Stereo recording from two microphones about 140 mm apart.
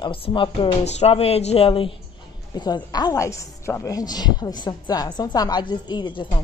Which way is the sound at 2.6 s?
30° left (ahead or behind).